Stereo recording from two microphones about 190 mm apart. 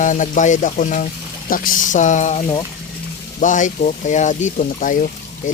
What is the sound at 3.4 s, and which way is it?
Speech, 40° left (ahead or behind).